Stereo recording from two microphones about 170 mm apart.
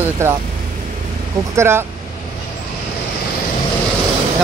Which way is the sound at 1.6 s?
15° right (ahead or behind).